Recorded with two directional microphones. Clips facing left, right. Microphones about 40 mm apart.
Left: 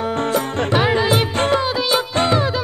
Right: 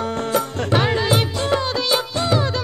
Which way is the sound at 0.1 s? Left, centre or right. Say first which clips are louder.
Left 2 dB; left.